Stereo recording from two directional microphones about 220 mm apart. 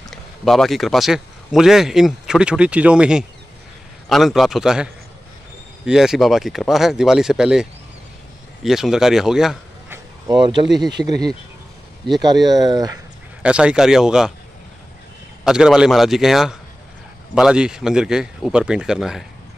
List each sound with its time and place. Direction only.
0.1 s a man's voice: centre (ahead or behind)
8.6 s speech: centre (ahead or behind)
10.2 s speech: 20° right (ahead or behind)
12.2 s speech: 20° right (ahead or behind)
13.4 s a man's voice: 5° right (ahead or behind)
15.4 s a man's voice: 5° right (ahead or behind)